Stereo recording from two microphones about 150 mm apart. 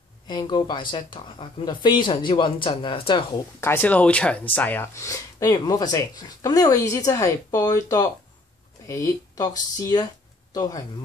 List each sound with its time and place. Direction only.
0.3 s speech: 30° left (ahead or behind)
3.6 s speech: 15° left (ahead or behind)